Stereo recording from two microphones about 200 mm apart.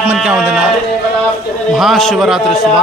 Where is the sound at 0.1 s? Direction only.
5° right (ahead or behind).